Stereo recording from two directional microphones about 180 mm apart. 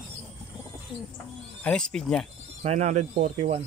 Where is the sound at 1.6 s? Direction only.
5° left (ahead or behind).